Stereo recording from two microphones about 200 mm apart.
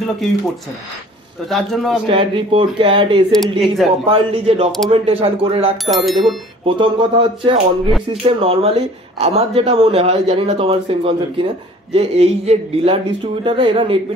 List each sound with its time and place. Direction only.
1.5 s speech: centre (ahead or behind)
2.0 s speech: 25° right (ahead or behind)
3.3 s speech: centre (ahead or behind)
4.0 s speech: 30° right (ahead or behind)
5.9 s speech: centre (ahead or behind)
6.6 s speech: 25° right (ahead or behind)